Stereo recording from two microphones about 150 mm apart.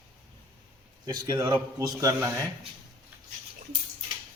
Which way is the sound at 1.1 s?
25° right (ahead or behind).